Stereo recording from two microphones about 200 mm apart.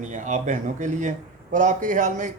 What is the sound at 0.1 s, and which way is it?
A man's voice, 40° right (ahead or behind).